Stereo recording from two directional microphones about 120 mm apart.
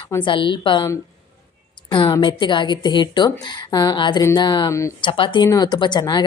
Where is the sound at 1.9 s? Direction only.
40° left (ahead or behind).